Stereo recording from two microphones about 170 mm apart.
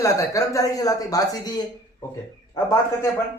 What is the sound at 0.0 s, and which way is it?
Speech, 20° left (ahead or behind).